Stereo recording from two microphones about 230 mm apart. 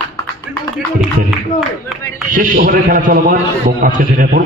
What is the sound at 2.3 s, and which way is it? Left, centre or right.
A man's voice, right.